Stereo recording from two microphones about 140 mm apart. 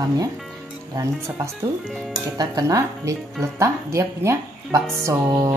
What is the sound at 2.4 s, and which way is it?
Speech, 25° right (ahead or behind).